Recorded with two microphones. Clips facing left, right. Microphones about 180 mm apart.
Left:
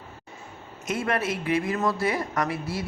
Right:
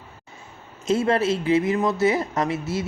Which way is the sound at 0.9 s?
25° right (ahead or behind).